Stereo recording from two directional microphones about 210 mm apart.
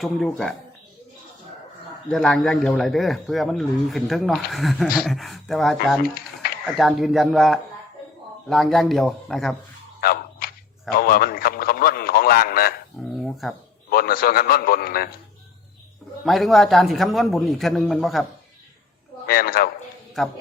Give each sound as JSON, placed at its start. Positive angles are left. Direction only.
{"t": 0.0, "sound": "speech", "side_deg": 0}
{"t": 2.0, "sound": "speech", "side_deg": 0}
{"t": 6.0, "sound": "a sound", "side_deg": 45}
{"t": 6.7, "sound": "speech", "side_deg": 0}
{"t": 10.0, "sound": "a sound", "side_deg": 45}
{"t": 10.9, "sound": "radio", "side_deg": 45}
{"t": 13.0, "sound": "dishes", "side_deg": 0}
{"t": 13.9, "sound": "a man's voice", "side_deg": 45}
{"t": 16.2, "sound": "speech", "side_deg": 0}
{"t": 19.3, "sound": "a man's voice", "side_deg": 45}
{"t": 20.2, "sound": "speech", "side_deg": 0}